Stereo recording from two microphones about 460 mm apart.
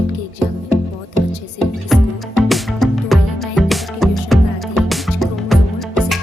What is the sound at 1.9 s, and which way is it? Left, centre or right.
Music, centre.